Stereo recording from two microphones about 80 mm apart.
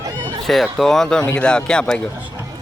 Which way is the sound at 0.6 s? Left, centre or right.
Centre.